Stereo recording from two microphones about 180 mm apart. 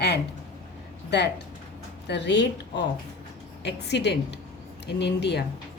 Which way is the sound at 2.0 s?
75° left (ahead or behind).